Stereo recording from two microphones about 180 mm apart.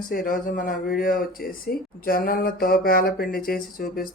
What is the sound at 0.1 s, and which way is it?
Speech, 50° left (ahead or behind).